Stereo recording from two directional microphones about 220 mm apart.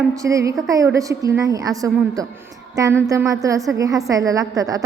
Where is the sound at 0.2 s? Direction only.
15° right (ahead or behind).